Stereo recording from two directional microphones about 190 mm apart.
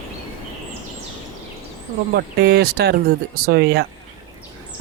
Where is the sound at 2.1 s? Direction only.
60° right (ahead or behind).